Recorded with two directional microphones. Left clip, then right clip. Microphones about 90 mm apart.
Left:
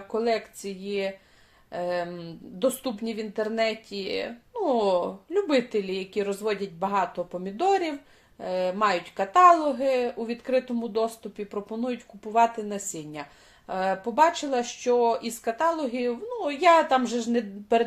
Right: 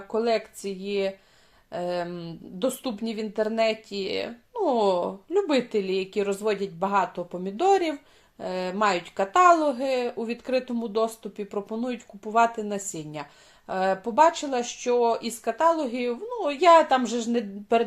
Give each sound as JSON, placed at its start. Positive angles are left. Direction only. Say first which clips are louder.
{"t": 0.1, "sound": "a woman's voice", "louder": "right 1 dB", "side_deg": -35}